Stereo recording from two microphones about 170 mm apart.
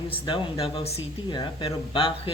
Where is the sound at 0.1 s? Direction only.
30° left (ahead or behind).